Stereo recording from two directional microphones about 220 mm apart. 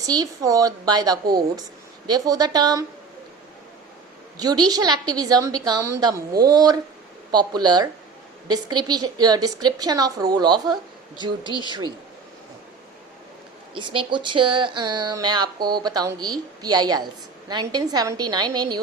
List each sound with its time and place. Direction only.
0.0 s a woman's voice: 15° right (ahead or behind)
4.4 s a woman's voice: 20° right (ahead or behind)
13.7 s speech: 20° right (ahead or behind)